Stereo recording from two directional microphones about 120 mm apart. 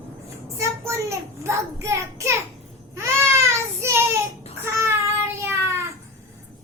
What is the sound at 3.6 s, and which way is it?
Child singing, 20° right (ahead or behind).